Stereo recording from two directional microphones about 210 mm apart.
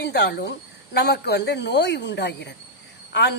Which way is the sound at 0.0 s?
50° left (ahead or behind).